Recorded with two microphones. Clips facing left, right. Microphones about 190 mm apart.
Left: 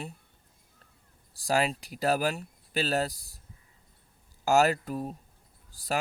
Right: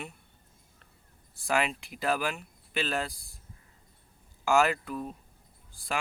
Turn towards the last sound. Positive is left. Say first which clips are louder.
# left 3 dB
turn(degrees=40)  # may be behind; listen again after turning